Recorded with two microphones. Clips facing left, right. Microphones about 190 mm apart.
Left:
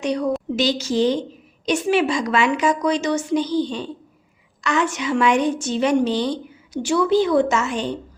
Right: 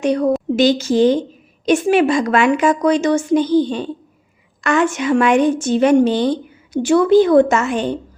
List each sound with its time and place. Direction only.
0.0 s a woman's voice: 50° right (ahead or behind)